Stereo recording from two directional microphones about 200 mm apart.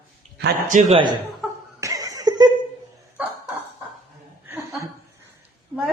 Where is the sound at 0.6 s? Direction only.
40° right (ahead or behind).